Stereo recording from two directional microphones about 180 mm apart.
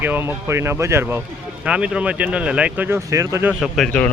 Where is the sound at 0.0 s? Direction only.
10° right (ahead or behind).